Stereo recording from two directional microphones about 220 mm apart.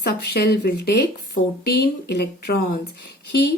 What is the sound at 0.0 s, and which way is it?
Speech, 45° left (ahead or behind).